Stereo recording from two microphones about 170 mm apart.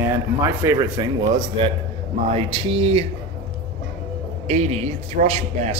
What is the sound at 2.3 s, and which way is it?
Speech, 35° right (ahead or behind).